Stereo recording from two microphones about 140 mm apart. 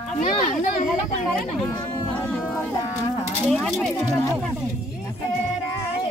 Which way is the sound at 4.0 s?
20° left (ahead or behind).